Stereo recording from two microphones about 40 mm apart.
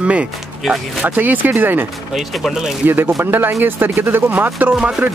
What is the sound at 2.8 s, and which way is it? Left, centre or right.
Speech, right.